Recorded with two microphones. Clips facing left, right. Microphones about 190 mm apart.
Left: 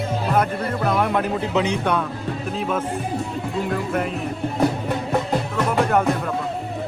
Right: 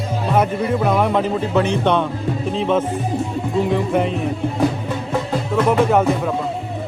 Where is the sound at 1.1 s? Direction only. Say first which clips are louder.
Right 3 dB; 5° left (ahead or behind).